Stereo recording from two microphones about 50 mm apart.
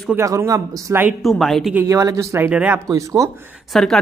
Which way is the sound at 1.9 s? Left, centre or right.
Right.